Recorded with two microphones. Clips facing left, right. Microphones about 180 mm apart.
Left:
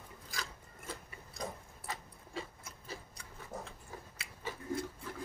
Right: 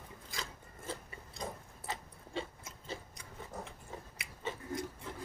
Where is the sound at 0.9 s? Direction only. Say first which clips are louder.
Right 3 dB; 30° right (ahead or behind).